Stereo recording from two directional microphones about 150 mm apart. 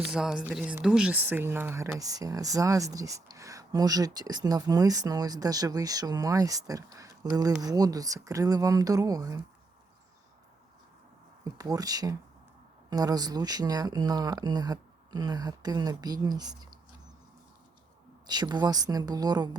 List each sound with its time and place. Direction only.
0.0 s speech: 5° right (ahead or behind); by 9.4 s 25° right (ahead or behind)
11.4 s speech: 25° right (ahead or behind)
18.3 s speech: 30° right (ahead or behind)